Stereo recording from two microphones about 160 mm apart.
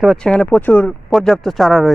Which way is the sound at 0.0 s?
Centre (ahead or behind).